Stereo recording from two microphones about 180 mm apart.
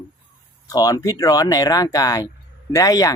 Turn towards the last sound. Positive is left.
turn(degrees=20)  # may be behind; listen again after turning